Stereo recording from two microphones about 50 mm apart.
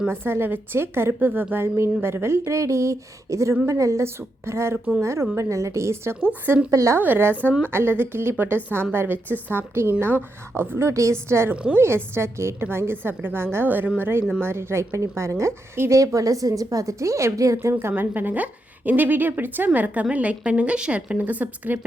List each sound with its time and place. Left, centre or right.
0.1 s a woman's voice: right
4.4 s a woman's voice: right
5.4 s a woman's voice: right
6.7 s speech: right
7.0 s a woman's voice: right
13.7 s a woman's voice: right
14.0 s a woman's voice: right
16.8 s speech: right
17.7 s a woman's voice: right